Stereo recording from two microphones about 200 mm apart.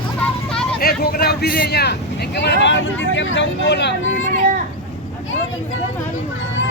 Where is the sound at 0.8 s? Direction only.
50° left (ahead or behind).